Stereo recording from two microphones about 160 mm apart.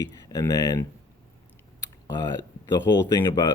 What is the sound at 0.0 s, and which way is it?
Speech, 20° left (ahead or behind).